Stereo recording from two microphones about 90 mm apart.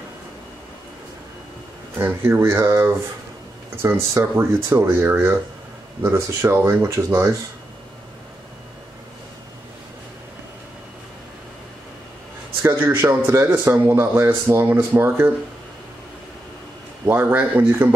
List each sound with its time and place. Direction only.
2.0 s a man's voice: 25° right (ahead or behind)
12.6 s a man's voice: 25° right (ahead or behind)
17.0 s a man's voice: 25° right (ahead or behind)